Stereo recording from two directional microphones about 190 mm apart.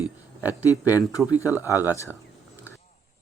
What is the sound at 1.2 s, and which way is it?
Speech, centre (ahead or behind).